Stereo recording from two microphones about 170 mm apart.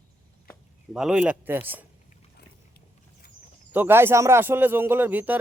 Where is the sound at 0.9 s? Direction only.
5° right (ahead or behind).